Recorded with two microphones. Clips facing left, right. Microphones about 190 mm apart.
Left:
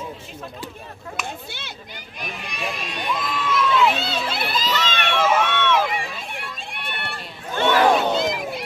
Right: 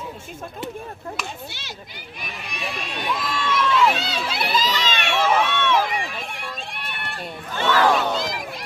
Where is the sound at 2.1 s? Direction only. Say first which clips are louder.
Left 2 dB; centre (ahead or behind).